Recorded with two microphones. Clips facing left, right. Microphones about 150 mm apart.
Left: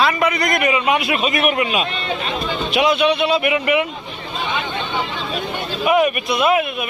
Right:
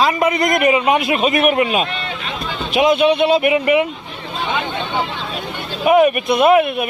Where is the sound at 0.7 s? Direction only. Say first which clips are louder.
Right 3 dB; 40° right (ahead or behind).